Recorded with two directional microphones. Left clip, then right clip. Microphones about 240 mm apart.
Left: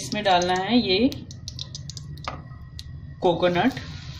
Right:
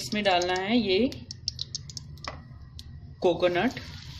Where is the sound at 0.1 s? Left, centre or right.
Centre.